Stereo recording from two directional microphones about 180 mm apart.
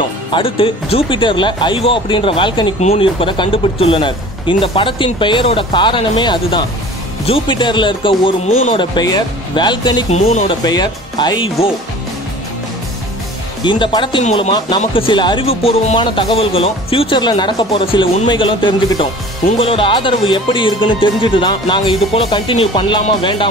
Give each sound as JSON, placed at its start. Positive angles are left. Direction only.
{"t": 0.3, "sound": "speech", "side_deg": 30}
{"t": 10.0, "sound": "speech", "side_deg": 35}
{"t": 10.6, "sound": "speech", "side_deg": 20}
{"t": 13.7, "sound": "speech", "side_deg": 25}
{"t": 14.2, "sound": "speech", "side_deg": 40}